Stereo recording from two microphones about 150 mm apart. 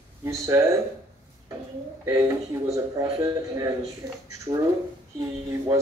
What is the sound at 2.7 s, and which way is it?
Speech, 20° right (ahead or behind).